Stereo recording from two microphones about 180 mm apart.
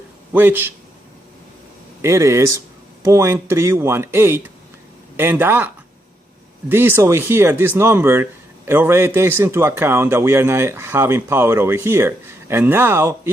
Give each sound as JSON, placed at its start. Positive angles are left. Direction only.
{"t": 0.3, "sound": "speech", "side_deg": -10}
{"t": 2.0, "sound": "speech", "side_deg": -15}